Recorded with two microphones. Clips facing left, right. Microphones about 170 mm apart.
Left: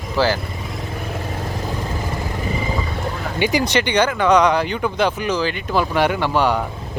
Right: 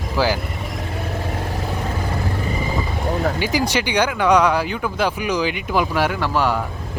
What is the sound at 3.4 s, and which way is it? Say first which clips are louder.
Speech: left 2 dB; centre (ahead or behind).